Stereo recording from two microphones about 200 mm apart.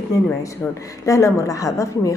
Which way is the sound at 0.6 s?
5° left (ahead or behind).